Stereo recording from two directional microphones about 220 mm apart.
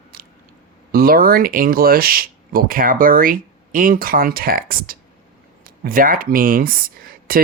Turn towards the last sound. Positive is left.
turn(degrees=-40)  # may be behind; listen again after turning